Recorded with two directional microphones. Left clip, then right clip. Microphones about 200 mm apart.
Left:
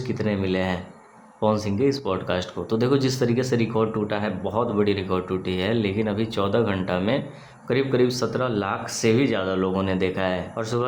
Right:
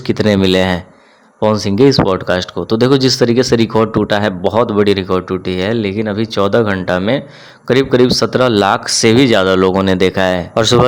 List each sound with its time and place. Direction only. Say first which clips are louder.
0.1 s speech: right 14 dB; 45° right (ahead or behind)